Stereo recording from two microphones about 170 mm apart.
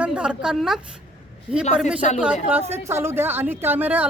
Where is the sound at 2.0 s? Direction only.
45° left (ahead or behind).